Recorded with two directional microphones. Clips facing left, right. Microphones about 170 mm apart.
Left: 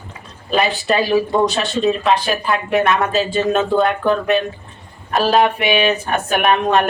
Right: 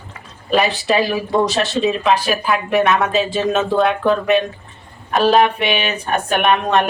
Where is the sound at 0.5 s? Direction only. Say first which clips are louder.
Right 1 dB; centre (ahead or behind).